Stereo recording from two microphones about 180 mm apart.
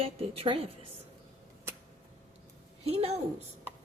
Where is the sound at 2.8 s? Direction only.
35° right (ahead or behind).